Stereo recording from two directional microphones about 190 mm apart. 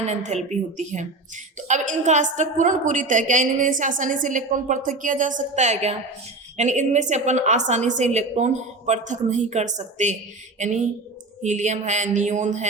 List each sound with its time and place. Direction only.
0.0 s a woman's voice: 35° right (ahead or behind)